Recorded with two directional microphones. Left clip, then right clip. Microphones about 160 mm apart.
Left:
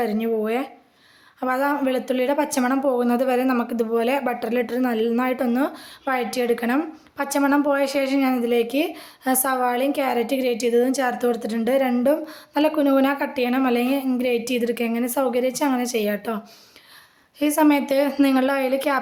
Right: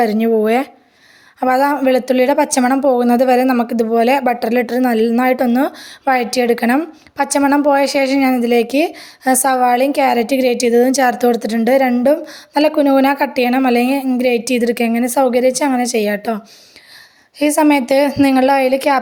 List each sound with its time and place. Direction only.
0.0 s a woman's voice: 40° right (ahead or behind)
17.4 s a woman's voice: 30° right (ahead or behind)